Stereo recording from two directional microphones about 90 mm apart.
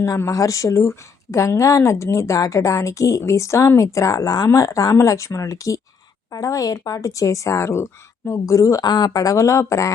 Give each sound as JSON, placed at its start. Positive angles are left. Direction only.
{"t": 0.0, "sound": "speech", "side_deg": 35}